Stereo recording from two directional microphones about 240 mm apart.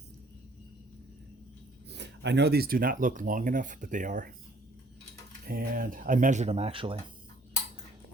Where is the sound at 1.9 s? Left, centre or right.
Right.